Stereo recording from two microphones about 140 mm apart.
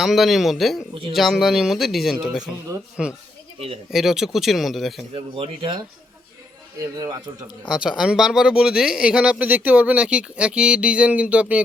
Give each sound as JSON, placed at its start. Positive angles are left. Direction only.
{"t": 0.0, "sound": "speech", "side_deg": 0}
{"t": 5.1, "sound": "a man's voice", "side_deg": -40}
{"t": 7.7, "sound": "speech", "side_deg": -5}